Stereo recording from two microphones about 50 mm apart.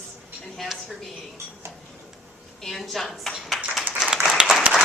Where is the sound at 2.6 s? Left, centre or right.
Centre.